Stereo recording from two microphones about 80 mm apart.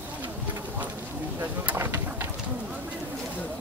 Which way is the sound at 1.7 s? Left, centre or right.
Right.